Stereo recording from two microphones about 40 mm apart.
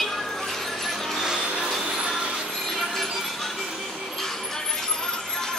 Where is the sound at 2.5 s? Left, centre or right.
Centre.